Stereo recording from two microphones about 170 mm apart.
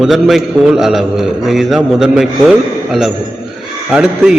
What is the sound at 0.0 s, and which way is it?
A man's voice, centre (ahead or behind).